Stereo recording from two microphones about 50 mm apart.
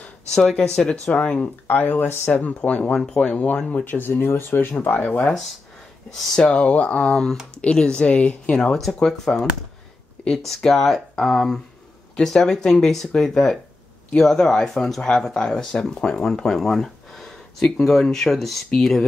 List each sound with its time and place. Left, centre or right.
0.3 s speech: centre
1.8 s speech: left
2.5 s speech: left
3.8 s speech: left
4.7 s speech: left
6.3 s speech: centre
8.5 s speech: centre
10.6 s speech: centre
15.0 s speech: centre
16.3 s a sound: centre
17.6 s speech: centre